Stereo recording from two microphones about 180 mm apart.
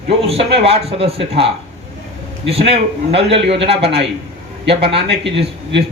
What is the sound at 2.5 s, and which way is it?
Speech, 35° right (ahead or behind).